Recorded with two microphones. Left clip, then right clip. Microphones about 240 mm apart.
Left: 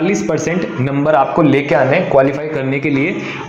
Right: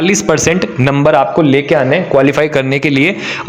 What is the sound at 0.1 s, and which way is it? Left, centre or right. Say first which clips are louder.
A man's voice: right 5 dB; right.